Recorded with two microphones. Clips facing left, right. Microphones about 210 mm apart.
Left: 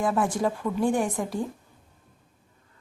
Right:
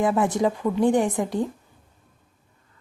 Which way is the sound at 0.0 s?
20° right (ahead or behind).